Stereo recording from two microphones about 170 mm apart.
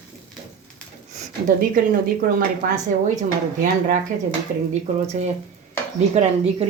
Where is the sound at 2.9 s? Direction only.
55° right (ahead or behind).